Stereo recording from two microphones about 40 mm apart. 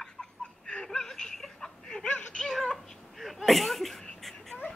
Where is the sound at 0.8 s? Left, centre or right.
Centre.